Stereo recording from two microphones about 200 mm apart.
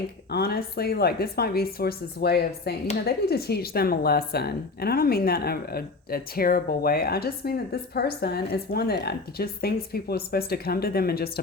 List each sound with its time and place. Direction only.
0.3 s a woman's voice: 50° left (ahead or behind)